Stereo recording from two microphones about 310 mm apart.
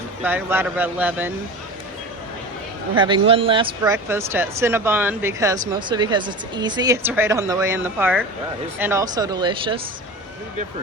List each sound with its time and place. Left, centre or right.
0.2 s speech: centre
2.9 s speech: centre